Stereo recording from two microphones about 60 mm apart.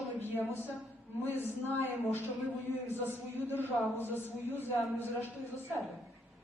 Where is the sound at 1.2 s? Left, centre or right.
Left.